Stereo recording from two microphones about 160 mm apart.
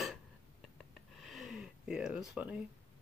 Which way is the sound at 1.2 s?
Centre (ahead or behind).